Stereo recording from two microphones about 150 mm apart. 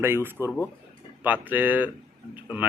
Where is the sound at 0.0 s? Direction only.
15° right (ahead or behind).